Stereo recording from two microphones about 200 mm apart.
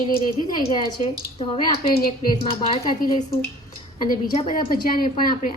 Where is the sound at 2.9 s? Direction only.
45° left (ahead or behind).